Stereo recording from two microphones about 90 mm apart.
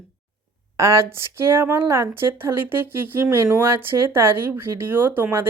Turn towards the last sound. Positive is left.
turn(degrees=-20)  # may be behind; listen again after turning